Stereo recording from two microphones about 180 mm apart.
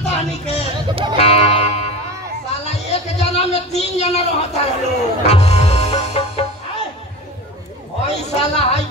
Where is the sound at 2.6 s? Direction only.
35° left (ahead or behind).